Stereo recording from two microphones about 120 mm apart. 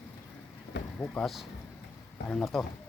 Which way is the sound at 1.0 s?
10° left (ahead or behind).